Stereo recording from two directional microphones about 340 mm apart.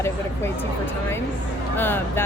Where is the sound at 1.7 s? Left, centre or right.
Centre.